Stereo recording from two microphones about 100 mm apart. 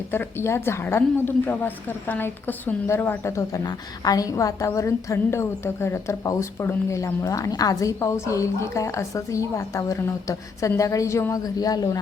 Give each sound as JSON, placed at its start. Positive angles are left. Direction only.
{"t": 0.1, "sound": "a woman's voice", "side_deg": 25}